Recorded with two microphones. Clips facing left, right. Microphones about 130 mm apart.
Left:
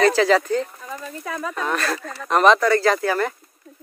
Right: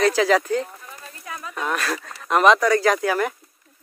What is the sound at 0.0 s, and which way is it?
Speech, 5° right (ahead or behind).